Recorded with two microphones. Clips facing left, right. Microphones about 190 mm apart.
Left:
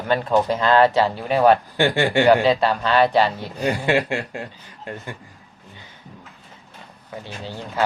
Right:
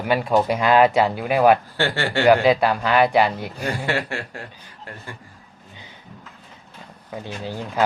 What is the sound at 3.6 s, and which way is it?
Chuckle, 15° left (ahead or behind).